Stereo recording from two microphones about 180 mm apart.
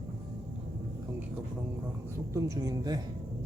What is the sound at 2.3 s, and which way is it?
Speech, 20° right (ahead or behind).